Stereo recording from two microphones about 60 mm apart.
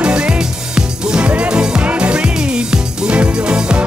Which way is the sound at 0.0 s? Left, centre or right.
Centre.